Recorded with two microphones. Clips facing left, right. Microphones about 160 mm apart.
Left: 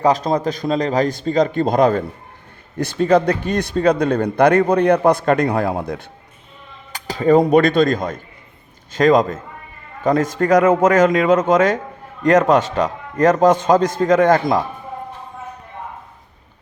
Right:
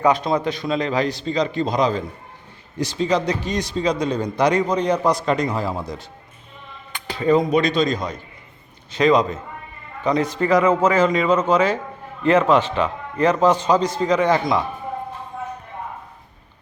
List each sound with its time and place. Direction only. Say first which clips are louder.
0.0 s a man's voice: left 2 dB; 40° left (ahead or behind); by 6.1 s 60° left (ahead or behind)
6.9 s a man's voice: left 4 dB; 40° left (ahead or behind)